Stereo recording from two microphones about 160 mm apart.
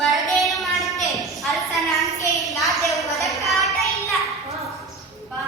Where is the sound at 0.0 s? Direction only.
Centre (ahead or behind).